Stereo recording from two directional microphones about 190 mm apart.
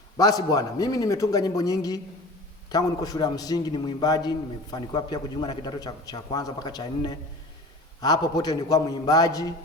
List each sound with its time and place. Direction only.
0.2 s a man's voice: 20° left (ahead or behind)